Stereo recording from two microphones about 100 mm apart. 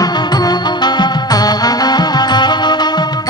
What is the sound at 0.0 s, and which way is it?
Music, 40° left (ahead or behind).